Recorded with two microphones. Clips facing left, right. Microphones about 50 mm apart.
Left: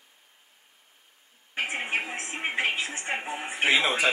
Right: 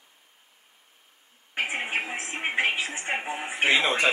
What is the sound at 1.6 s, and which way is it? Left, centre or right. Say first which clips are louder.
Speech: right 1 dB; centre.